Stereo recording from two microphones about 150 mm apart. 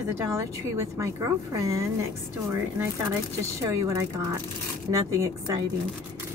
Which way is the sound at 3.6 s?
20° right (ahead or behind).